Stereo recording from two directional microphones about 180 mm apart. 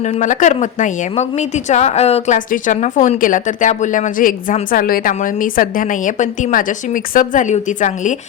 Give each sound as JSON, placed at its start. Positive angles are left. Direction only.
{"t": 0.0, "sound": "a woman's voice", "side_deg": 45}